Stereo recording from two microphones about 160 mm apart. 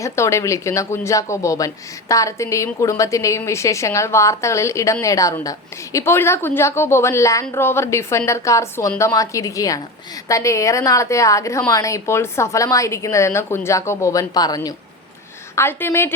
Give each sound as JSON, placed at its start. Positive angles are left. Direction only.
{"t": 0.0, "sound": "a woman's voice", "side_deg": 20}